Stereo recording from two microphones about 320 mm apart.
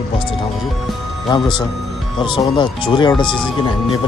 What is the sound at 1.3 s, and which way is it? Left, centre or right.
Speech, centre.